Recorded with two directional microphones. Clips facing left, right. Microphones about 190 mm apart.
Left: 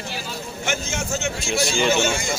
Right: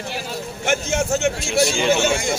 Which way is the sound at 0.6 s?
65° right (ahead or behind).